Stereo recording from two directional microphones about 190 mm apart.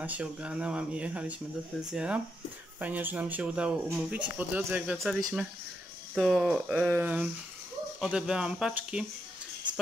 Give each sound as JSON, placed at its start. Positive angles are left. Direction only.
{"t": 0.0, "sound": "speech", "side_deg": -5}